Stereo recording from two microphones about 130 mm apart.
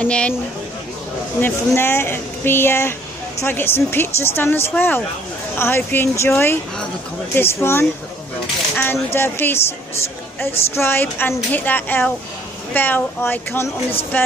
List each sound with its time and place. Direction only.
0.0 s speech: 10° left (ahead or behind)
1.4 s speech: 20° left (ahead or behind)
8.9 s speech: 20° left (ahead or behind)